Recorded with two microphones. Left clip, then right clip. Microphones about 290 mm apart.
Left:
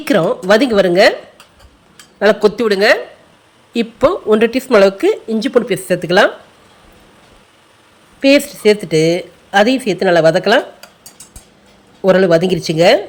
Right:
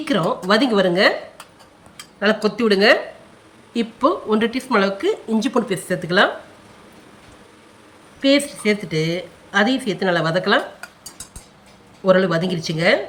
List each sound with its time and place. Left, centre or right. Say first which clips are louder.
0.0 s a woman's voice: left 7 dB; centre
2.1 s a woman's voice: left 8 dB; centre
8.2 s a woman's voice: left 7 dB; centre
12.0 s a woman's voice: left 6 dB; centre